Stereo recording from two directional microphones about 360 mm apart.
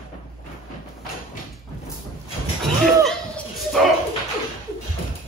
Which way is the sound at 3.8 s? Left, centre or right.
Centre.